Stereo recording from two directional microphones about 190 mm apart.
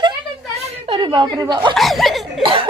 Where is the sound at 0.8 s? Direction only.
25° right (ahead or behind).